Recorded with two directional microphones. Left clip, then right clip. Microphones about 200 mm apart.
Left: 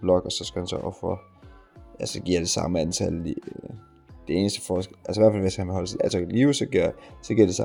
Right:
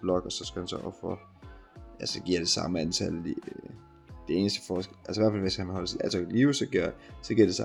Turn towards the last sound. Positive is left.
turn(degrees=40)  # may be behind; listen again after turning